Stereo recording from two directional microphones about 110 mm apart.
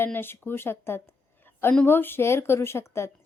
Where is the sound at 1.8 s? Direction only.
20° left (ahead or behind).